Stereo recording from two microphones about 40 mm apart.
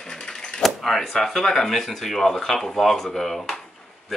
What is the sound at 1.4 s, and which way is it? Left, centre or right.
Speech, centre.